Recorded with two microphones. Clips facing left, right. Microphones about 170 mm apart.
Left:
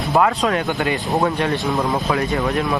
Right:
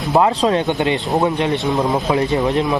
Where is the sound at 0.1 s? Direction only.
25° right (ahead or behind).